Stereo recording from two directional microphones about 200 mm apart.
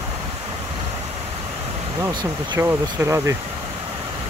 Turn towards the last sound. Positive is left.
turn(degrees=-15)  # may be behind; listen again after turning